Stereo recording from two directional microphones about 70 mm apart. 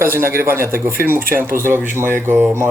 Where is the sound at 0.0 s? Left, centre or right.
Right.